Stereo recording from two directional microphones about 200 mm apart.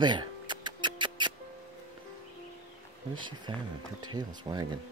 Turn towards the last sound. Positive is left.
turn(degrees=-20)  # may be behind; listen again after turning